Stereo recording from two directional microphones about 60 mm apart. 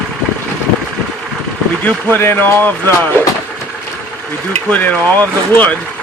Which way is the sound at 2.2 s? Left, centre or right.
Left.